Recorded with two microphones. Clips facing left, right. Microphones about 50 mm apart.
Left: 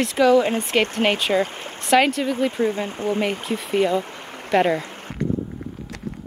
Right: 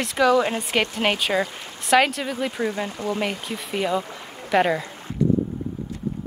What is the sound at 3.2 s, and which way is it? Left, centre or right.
Speech, centre.